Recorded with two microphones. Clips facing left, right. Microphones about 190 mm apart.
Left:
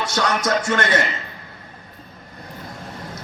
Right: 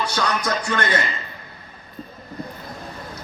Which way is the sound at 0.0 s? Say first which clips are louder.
Left 2 dB; 90° left.